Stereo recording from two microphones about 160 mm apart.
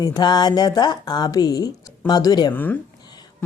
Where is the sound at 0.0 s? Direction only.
25° left (ahead or behind).